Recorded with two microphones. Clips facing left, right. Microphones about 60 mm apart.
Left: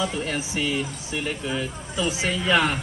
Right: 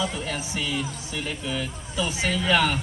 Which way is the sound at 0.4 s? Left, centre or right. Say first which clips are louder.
Left 3 dB; left.